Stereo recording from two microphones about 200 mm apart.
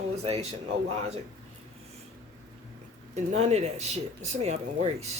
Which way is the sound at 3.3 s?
35° right (ahead or behind).